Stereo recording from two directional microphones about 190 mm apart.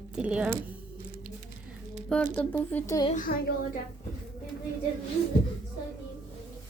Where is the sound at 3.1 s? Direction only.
45° left (ahead or behind).